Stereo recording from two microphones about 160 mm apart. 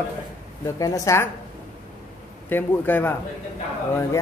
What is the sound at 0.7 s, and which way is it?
Speech, 20° left (ahead or behind).